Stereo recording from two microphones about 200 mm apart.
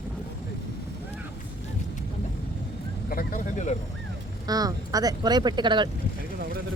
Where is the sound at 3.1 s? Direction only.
45° left (ahead or behind).